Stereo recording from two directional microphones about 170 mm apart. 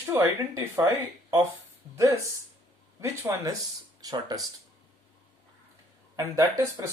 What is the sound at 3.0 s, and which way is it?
Speech, 15° right (ahead or behind).